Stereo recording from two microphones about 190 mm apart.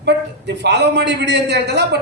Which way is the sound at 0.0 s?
65° right (ahead or behind).